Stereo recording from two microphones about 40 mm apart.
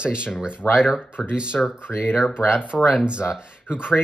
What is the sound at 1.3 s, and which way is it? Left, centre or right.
Speech, right.